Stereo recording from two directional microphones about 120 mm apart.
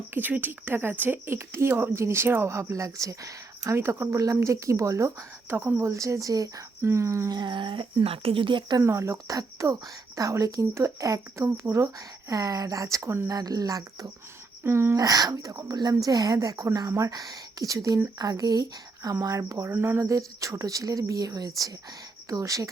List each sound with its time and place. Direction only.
0.1 s speech: 15° right (ahead or behind)
7.3 s speech: 40° right (ahead or behind)
8.8 s speech: 25° right (ahead or behind)
14.6 s a woman's voice: 20° right (ahead or behind)